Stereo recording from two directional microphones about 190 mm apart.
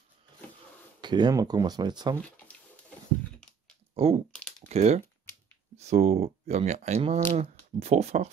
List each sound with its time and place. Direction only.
1.0 s speech: 20° right (ahead or behind)
3.9 s typing: 30° right (ahead or behind)
4.4 s typing: 5° left (ahead or behind)
4.6 s speech: 35° right (ahead or behind)